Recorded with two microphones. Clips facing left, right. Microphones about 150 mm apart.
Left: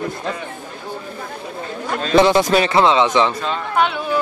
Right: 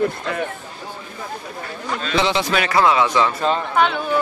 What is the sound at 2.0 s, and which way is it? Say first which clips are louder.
Speech: left 7 dB; 50° left (ahead or behind).